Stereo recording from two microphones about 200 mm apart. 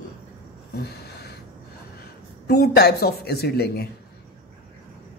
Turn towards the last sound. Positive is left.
turn(degrees=55)  # may be behind; listen again after turning